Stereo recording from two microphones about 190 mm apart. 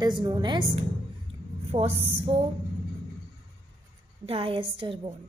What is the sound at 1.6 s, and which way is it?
Speech, 30° right (ahead or behind).